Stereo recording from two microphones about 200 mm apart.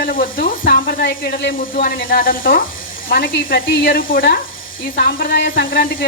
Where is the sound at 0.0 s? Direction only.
45° left (ahead or behind).